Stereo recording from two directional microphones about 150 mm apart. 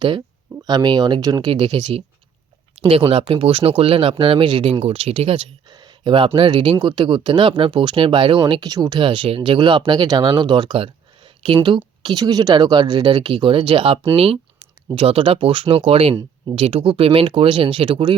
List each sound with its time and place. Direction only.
0.0 s speech: 30° right (ahead or behind)
5.7 s speech: 30° right (ahead or behind)